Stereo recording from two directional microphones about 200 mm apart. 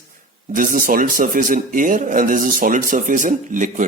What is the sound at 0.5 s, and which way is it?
Speech, 40° right (ahead or behind).